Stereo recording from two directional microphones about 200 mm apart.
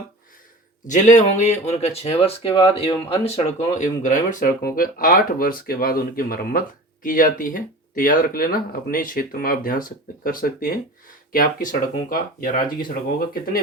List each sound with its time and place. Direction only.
0.9 s speech: 40° left (ahead or behind)